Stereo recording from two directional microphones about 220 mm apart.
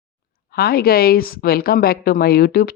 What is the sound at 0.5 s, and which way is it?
Speech, 45° left (ahead or behind).